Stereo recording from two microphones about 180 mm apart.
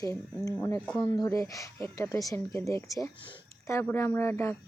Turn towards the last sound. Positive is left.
turn(degrees=15)  # may be behind; listen again after turning